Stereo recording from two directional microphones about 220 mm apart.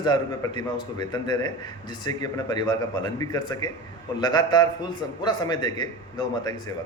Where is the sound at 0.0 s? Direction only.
20° left (ahead or behind).